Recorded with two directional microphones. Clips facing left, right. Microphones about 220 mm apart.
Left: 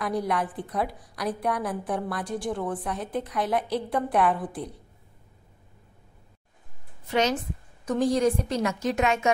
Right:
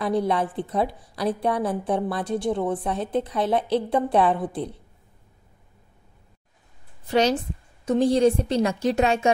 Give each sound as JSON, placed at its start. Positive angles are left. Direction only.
{"t": 0.0, "sound": "a woman's voice", "side_deg": -25}
{"t": 7.1, "sound": "a woman's voice", "side_deg": -35}